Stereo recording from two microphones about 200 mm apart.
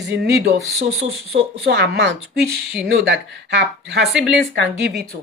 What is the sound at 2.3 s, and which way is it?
Speech, centre (ahead or behind).